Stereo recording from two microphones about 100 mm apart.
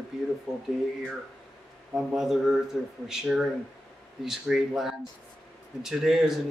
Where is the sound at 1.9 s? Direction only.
5° right (ahead or behind).